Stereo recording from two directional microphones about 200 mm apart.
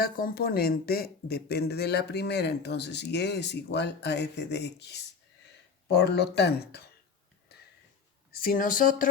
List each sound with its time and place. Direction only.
0.0 s speech: 50° left (ahead or behind)
8.3 s speech: 45° left (ahead or behind)